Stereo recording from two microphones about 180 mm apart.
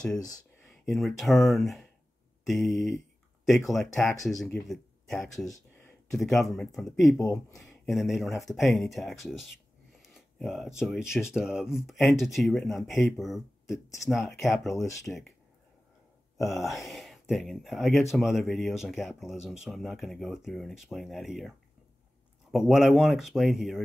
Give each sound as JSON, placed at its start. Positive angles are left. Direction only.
{"t": 0.8, "sound": "speech", "side_deg": 0}
{"t": 7.2, "sound": "speech", "side_deg": 20}
{"t": 7.8, "sound": "speech", "side_deg": 0}
{"t": 16.3, "sound": "speech", "side_deg": 0}